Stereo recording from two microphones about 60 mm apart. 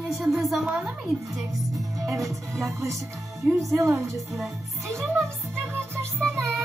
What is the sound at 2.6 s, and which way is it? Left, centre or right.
Music, right.